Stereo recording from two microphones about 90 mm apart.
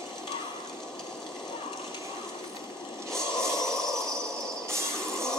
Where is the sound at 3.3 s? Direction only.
30° right (ahead or behind).